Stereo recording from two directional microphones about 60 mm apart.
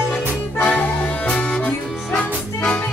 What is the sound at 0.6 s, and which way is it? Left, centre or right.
Accordion, left.